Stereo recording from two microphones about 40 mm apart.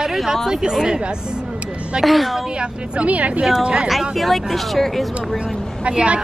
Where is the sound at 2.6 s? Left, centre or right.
Right.